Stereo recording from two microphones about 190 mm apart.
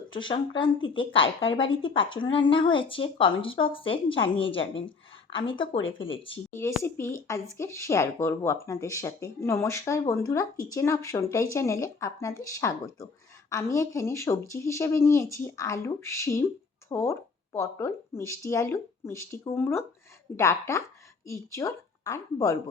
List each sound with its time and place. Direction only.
0.1 s speech: 25° left (ahead or behind)
6.8 s speech: 15° left (ahead or behind)